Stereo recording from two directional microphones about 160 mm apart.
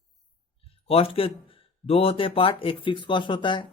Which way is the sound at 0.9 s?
35° left (ahead or behind).